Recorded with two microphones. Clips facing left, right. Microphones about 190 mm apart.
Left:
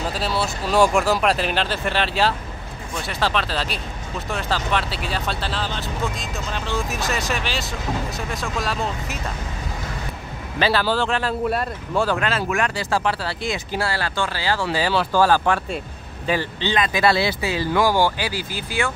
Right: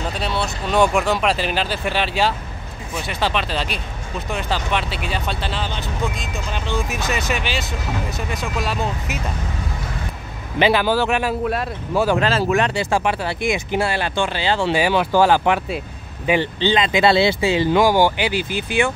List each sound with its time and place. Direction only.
0.0 s speech: centre (ahead or behind)
10.6 s speech: 15° right (ahead or behind)
12.2 s speech: 30° right (ahead or behind)